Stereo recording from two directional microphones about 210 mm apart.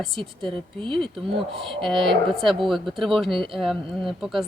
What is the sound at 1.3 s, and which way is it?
Speech, 25° right (ahead or behind).